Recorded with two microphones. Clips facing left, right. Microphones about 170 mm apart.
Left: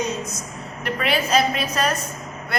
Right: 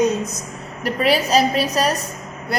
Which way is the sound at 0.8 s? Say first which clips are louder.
Right 5 dB; 35° right (ahead or behind).